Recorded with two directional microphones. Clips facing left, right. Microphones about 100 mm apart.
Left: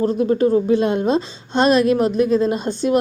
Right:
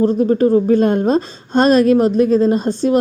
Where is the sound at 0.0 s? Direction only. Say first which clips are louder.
Right 3 dB; 35° right (ahead or behind).